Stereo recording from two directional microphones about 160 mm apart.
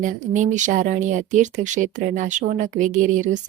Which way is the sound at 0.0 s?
55° right (ahead or behind).